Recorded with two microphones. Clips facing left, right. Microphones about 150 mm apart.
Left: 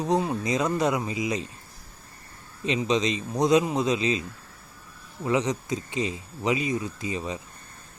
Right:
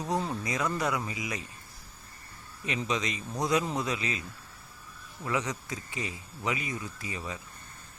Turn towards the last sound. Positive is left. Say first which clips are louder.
# left 7 dB
turn(degrees=20)  # may be behind; listen again after turning